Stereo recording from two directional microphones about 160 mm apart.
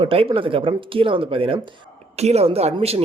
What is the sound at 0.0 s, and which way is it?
Speech, 35° right (ahead or behind).